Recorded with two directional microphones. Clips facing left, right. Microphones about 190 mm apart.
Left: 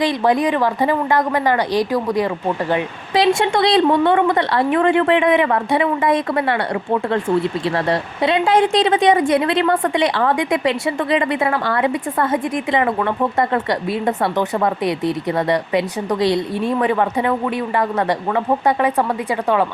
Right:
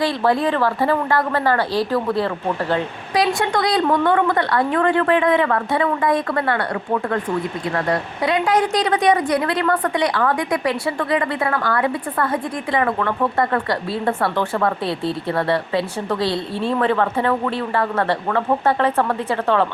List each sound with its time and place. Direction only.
0.0 s speech: 15° left (ahead or behind)
3.2 s a woman's voice: 25° left (ahead or behind)
18.3 s speech: 15° left (ahead or behind)